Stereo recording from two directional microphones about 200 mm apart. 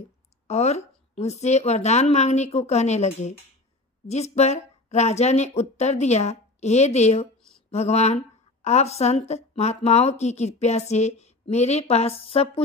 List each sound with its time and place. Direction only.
0.5 s speech: 30° left (ahead or behind)